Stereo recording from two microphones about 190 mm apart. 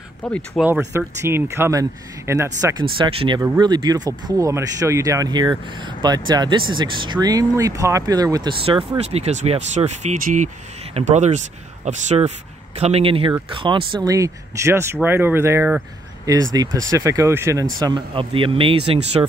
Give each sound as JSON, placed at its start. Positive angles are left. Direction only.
{"t": 0.2, "sound": "speech", "side_deg": 5}
{"t": 0.6, "sound": "speech", "side_deg": -10}
{"t": 3.0, "sound": "speech", "side_deg": -30}
{"t": 8.9, "sound": "speech", "side_deg": -35}